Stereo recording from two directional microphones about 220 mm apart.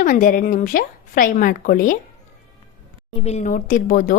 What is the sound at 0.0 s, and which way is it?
Speech, 35° left (ahead or behind).